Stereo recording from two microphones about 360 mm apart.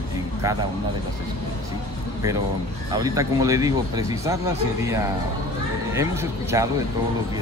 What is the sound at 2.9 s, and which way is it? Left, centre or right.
Speech, centre.